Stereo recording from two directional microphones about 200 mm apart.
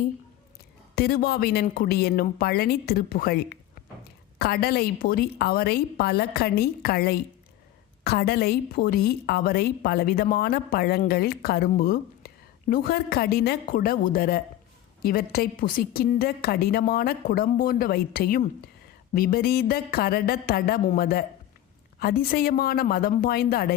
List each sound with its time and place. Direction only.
0.9 s a woman's voice: 50° left (ahead or behind)